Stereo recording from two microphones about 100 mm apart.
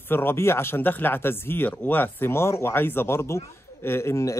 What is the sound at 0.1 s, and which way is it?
A man's voice, 20° left (ahead or behind).